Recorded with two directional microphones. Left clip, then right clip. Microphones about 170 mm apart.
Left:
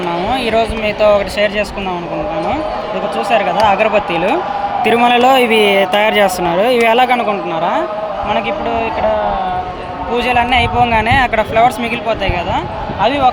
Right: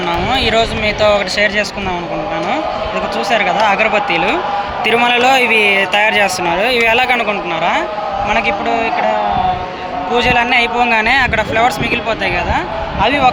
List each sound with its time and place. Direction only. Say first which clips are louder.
0.3 s a man's voice: right 1 dB; 20° left (ahead or behind)
3.2 s speech: left 1 dB; 20° left (ahead or behind); by 4.4 s 45° left (ahead or behind)
4.8 s speech: left 2 dB; 70° left (ahead or behind); by 7.9 s 45° left (ahead or behind)
8.3 s a man's voice: right 2 dB; 25° left (ahead or behind)
10.1 s a man's voice: right 1 dB; 20° left (ahead or behind)